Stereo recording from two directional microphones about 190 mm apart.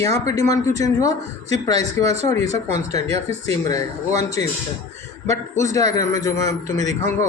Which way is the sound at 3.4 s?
15° left (ahead or behind).